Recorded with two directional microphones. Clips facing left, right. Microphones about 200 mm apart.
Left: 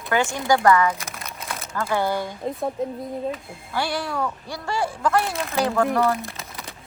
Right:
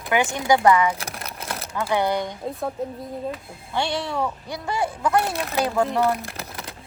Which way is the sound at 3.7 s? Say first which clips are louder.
Right 1 dB; 25° right (ahead or behind).